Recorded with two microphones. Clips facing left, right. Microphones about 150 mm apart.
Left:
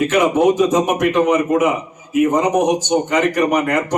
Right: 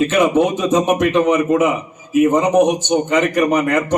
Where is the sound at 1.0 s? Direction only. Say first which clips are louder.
Right 1 dB; 20° left (ahead or behind).